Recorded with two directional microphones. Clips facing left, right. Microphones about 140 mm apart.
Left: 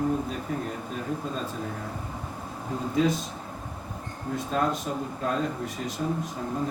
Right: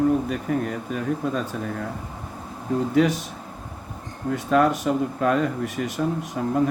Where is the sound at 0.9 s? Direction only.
85° right.